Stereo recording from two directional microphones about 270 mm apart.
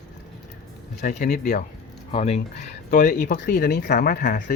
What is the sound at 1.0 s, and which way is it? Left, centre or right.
Speech, left.